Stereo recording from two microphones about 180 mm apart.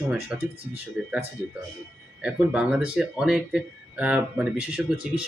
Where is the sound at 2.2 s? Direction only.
5° right (ahead or behind).